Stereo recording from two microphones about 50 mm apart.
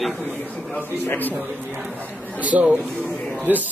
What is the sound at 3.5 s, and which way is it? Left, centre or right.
Speech, right.